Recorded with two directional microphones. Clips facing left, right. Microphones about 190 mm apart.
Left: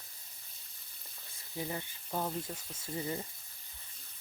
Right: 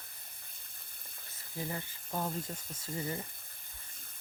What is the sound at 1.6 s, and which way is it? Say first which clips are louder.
Speech: left 1 dB; 20° left (ahead or behind).